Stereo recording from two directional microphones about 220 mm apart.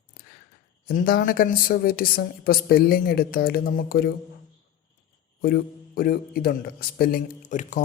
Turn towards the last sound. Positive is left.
turn(degrees=35)  # may be behind; listen again after turning